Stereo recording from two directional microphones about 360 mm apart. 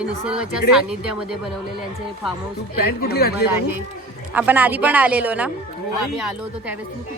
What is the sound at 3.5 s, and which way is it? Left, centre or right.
Speech, left.